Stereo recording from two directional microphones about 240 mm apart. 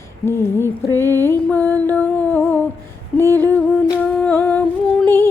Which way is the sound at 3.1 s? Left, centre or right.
Centre.